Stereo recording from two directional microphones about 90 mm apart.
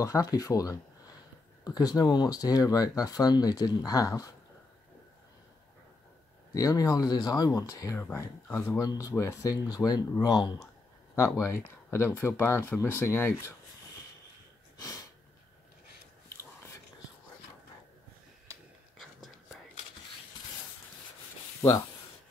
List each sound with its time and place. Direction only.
0.0 s speech: 40° left (ahead or behind)
6.5 s speech: 40° left (ahead or behind)
8.7 s speech: 40° left (ahead or behind)
11.1 s speech: 30° left (ahead or behind)
14.8 s sniff: 40° left (ahead or behind)